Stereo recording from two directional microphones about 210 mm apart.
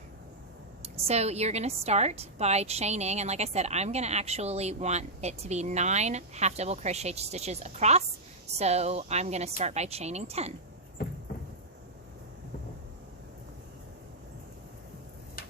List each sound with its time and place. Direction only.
0.9 s a woman's voice: 30° right (ahead or behind)